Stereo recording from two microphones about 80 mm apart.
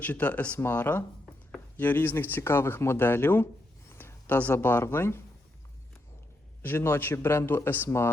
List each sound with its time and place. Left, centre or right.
0.0 s speech: left
6.6 s speech: left